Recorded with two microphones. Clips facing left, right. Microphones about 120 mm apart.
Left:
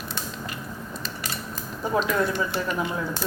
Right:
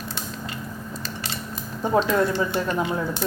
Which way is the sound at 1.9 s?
30° right (ahead or behind).